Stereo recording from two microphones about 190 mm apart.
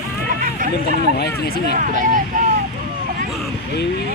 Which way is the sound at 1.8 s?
40° right (ahead or behind).